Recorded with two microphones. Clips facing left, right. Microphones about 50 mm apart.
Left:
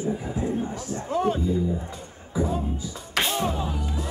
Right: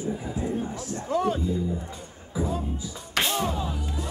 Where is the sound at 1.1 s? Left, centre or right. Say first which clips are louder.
Left 1 dB; left.